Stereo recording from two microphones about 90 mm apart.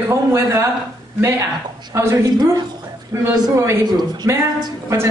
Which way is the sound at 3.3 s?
45° right (ahead or behind).